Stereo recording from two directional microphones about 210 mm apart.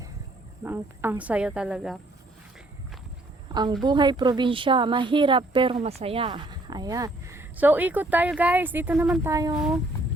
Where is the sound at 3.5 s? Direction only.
20° right (ahead or behind).